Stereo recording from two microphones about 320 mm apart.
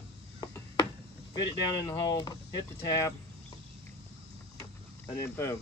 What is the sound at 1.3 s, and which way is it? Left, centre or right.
Speech, centre.